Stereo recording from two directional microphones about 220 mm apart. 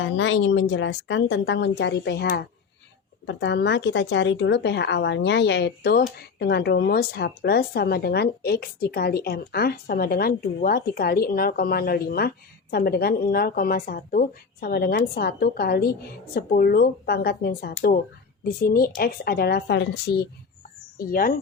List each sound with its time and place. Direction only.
0.0 s speech: 60° left (ahead or behind); by 21.3 s 40° left (ahead or behind)